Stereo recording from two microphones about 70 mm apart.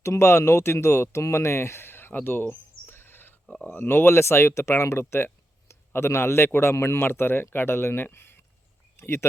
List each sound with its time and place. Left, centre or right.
0.0 s speech: left
3.4 s speech: centre
3.8 s speech: left